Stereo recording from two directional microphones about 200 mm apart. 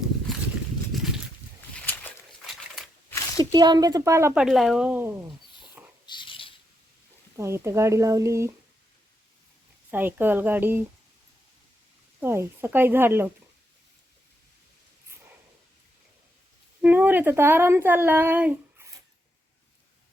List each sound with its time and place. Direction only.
0.9 s a sound: centre (ahead or behind)
3.3 s speech: 20° right (ahead or behind)
4.4 s speech: centre (ahead or behind)
6.1 s a sound: 25° left (ahead or behind)
7.3 s speech: 15° right (ahead or behind)
9.9 s speech: 10° right (ahead or behind)
12.2 s speech: 10° right (ahead or behind)
16.8 s speech: 10° right (ahead or behind)